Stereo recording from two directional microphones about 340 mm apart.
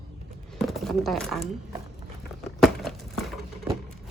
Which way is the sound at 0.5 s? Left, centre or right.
Centre.